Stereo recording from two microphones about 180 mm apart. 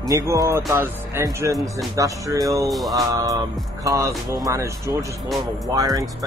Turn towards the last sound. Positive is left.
turn(degrees=-20)  # may be behind; listen again after turning